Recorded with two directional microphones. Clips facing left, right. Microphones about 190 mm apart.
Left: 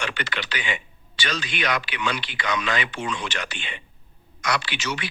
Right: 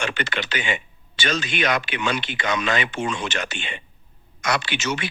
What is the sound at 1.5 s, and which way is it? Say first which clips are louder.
Speech: right 1 dB; 45° right (ahead or behind).